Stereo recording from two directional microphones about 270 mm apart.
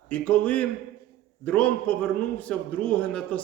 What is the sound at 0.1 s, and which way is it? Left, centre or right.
A man's voice, centre.